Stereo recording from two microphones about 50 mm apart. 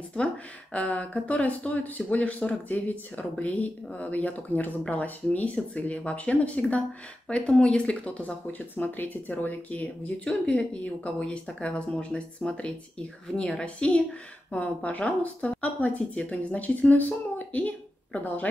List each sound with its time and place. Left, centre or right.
0.7 s speech: left
10.4 s speech: left